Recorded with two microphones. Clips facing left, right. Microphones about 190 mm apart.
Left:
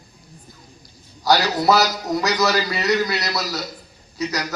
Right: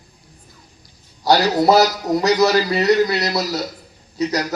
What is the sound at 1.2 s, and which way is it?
A man's voice, 30° right (ahead or behind).